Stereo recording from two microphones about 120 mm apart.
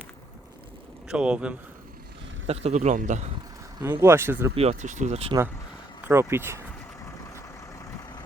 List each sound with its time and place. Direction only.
1.0 s speech: 10° right (ahead or behind)
2.5 s a man's voice: 60° right (ahead or behind); by 3.2 s 90° right
3.8 s speech: 20° right (ahead or behind)
4.5 s speech: 60° right (ahead or behind)
6.1 s speech: 20° right (ahead or behind)
7.3 s vehicle: 25° left (ahead or behind)